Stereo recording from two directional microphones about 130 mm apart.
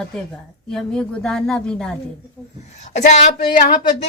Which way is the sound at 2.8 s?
65° left (ahead or behind).